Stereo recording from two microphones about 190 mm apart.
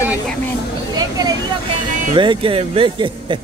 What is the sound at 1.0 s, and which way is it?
A man's voice, 20° right (ahead or behind).